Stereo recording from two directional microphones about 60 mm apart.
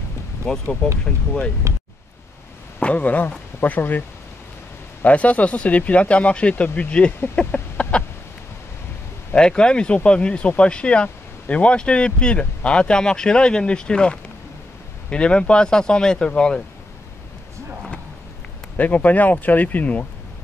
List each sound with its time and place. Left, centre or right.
0.5 s speech: centre
2.8 s speech: left
5.0 s speech: left
7.3 s a sound: left
9.3 s speech: centre
18.8 s speech: left